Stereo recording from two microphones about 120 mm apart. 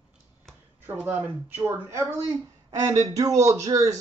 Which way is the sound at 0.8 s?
15° right (ahead or behind).